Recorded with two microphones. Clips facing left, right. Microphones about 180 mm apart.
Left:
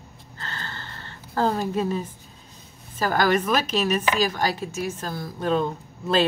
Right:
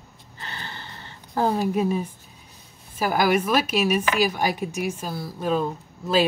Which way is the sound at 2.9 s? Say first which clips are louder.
Even; 10° right (ahead or behind).